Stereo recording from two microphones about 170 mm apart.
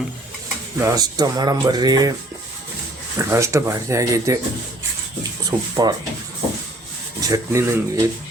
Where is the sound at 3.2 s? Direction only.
15° right (ahead or behind).